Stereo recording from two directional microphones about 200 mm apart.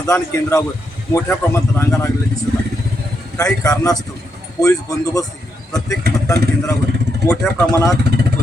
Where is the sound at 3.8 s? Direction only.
20° left (ahead or behind).